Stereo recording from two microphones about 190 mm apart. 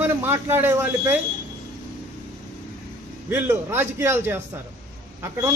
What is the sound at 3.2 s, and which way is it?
Speech, 10° right (ahead or behind).